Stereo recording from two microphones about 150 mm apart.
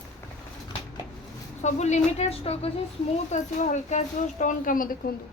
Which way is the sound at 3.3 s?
50° left (ahead or behind).